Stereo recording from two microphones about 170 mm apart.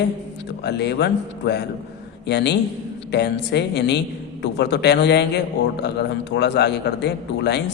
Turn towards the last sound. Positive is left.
turn(degrees=80)